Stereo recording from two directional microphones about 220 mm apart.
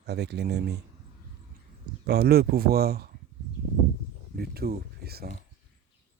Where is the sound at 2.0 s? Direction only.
45° right (ahead or behind).